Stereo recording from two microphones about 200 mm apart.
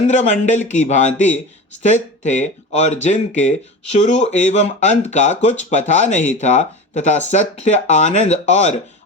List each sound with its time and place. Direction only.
0.1 s speech: 35° left (ahead or behind)